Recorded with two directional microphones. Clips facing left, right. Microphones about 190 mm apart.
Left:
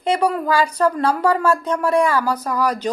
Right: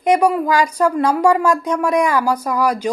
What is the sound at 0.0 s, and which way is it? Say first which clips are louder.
Speech: right 4 dB; 15° right (ahead or behind).